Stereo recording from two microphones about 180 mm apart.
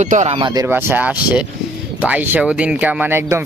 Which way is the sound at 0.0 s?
40° right (ahead or behind).